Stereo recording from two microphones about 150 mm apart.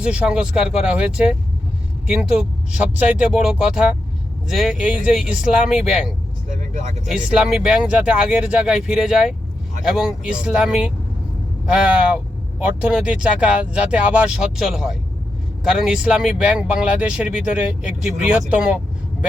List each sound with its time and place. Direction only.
0.0 s speech: 5° right (ahead or behind)
6.5 s speech: 55° right (ahead or behind)
7.1 s speech: 5° right (ahead or behind)